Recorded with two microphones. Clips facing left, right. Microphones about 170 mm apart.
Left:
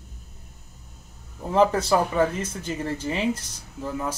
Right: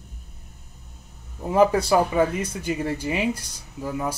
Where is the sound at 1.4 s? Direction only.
10° right (ahead or behind).